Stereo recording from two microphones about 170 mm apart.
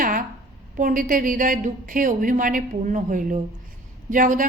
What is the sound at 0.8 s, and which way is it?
A woman's voice, 55° right (ahead or behind).